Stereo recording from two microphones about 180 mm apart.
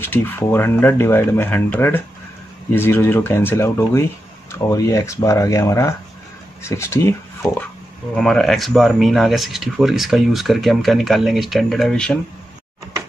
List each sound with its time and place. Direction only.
0.0 s speech: 10° left (ahead or behind)
8.2 s speech: 5° left (ahead or behind)